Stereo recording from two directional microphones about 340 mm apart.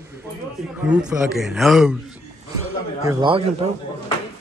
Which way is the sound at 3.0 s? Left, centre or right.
Centre.